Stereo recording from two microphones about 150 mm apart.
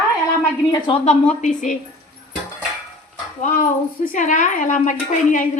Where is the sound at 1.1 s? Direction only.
50° left (ahead or behind).